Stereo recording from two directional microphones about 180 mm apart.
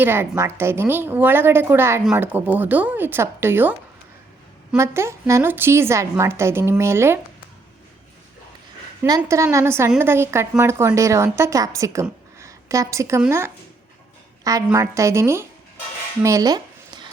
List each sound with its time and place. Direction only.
0.0 s a woman's voice: 10° right (ahead or behind)
4.8 s a woman's voice: 15° right (ahead or behind)
9.0 s a woman's voice: 20° right (ahead or behind)